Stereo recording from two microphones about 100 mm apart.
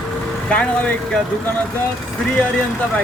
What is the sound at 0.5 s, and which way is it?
Speech, 15° left (ahead or behind).